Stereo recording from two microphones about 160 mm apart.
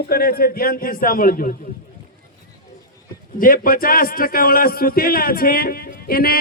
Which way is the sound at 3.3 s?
60° left (ahead or behind).